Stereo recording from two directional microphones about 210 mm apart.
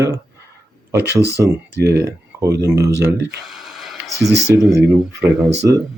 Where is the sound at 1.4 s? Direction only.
55° right (ahead or behind).